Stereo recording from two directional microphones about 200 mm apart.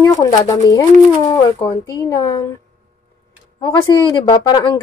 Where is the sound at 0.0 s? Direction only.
15° left (ahead or behind).